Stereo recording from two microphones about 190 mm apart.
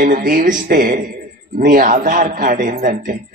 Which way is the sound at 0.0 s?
45° right (ahead or behind).